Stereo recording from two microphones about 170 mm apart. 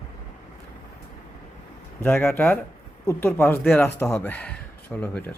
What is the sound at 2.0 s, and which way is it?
Speech, 15° left (ahead or behind).